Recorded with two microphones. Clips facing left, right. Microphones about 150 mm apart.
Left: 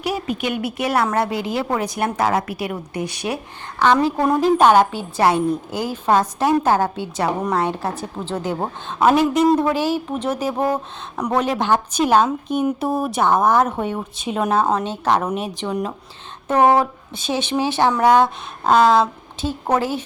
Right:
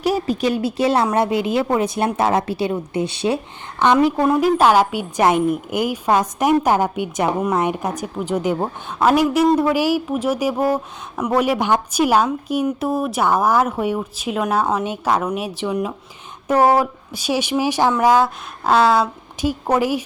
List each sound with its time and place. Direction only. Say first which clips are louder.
0.0 s a woman's voice: right 4 dB; 40° right (ahead or behind)
4.4 s a woman's voice: left 2 dB; 5° right (ahead or behind)